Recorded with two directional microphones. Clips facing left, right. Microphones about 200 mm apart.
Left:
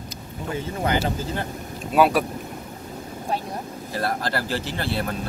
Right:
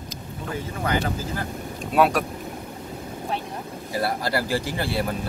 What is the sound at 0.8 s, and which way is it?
Speech, 30° left (ahead or behind).